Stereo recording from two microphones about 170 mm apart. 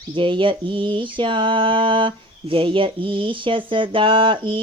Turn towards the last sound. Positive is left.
turn(degrees=-30)  # may be behind; listen again after turning